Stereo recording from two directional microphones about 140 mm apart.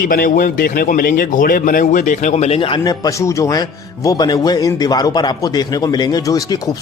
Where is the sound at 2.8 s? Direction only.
30° left (ahead or behind).